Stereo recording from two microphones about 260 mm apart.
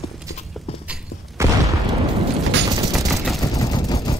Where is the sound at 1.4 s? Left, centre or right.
Centre.